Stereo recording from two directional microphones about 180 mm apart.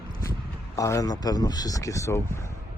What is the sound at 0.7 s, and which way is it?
Speech, 20° left (ahead or behind).